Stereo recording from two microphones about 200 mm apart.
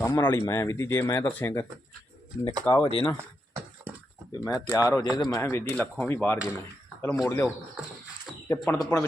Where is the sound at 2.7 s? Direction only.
25° left (ahead or behind).